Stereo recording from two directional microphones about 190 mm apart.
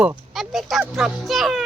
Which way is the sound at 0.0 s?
5° right (ahead or behind).